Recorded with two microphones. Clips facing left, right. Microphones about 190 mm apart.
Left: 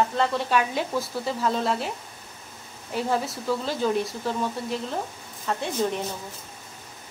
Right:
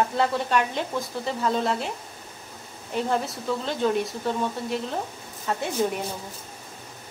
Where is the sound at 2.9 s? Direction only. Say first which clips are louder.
Even; 5° left (ahead or behind).